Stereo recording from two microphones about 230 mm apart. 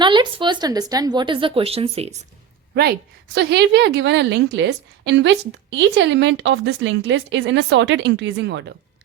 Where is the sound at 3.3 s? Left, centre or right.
Right.